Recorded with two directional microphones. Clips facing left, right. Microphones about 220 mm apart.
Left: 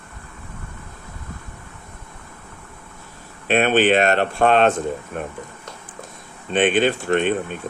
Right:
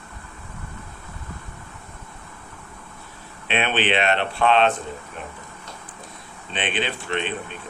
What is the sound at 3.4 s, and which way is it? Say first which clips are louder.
Speech: left 7 dB; 45° left (ahead or behind).